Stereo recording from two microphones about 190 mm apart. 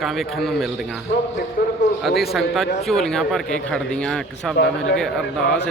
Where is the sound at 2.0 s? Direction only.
Centre (ahead or behind).